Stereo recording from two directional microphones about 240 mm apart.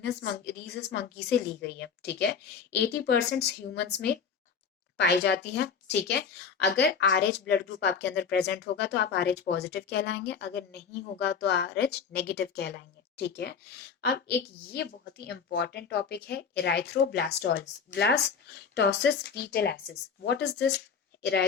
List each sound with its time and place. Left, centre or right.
0.0 s speech: left